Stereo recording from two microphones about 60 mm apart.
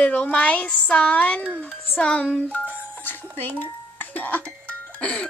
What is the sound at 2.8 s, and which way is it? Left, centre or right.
Music, left.